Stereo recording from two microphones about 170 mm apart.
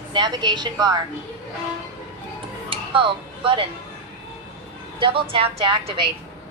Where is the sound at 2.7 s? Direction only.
30° right (ahead or behind).